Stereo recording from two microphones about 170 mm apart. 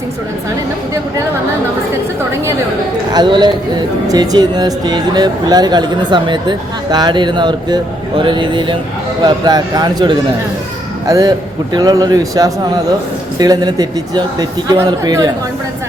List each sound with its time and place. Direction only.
3.1 s speech: 25° right (ahead or behind)